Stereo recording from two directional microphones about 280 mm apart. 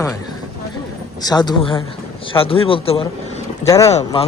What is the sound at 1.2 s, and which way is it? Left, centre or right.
Speech, centre.